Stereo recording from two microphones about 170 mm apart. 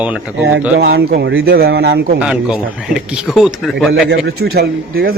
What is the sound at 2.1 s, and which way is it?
Speech, 5° right (ahead or behind).